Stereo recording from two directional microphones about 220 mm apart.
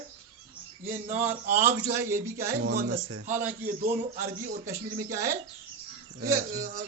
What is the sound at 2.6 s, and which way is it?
Speech, 45° right (ahead or behind).